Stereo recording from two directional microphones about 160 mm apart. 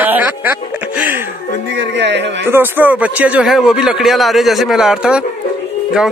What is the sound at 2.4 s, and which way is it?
Speech, 15° right (ahead or behind).